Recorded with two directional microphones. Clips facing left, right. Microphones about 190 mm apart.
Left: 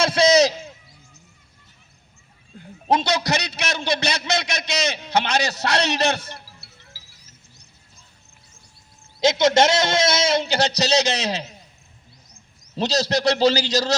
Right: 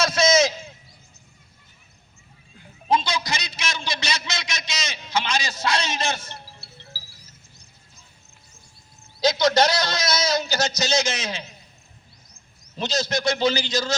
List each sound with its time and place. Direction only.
0.0 s a sound: 30° left (ahead or behind)
2.8 s a man's voice: 70° left (ahead or behind)
6.4 s music: 30° right (ahead or behind)
9.2 s a man's voice: 25° left (ahead or behind)
12.7 s a man's voice: 35° left (ahead or behind)